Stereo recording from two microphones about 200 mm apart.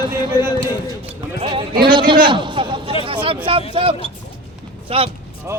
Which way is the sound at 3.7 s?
25° right (ahead or behind).